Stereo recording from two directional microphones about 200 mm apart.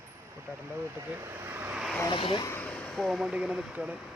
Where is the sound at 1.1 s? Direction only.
10° right (ahead or behind).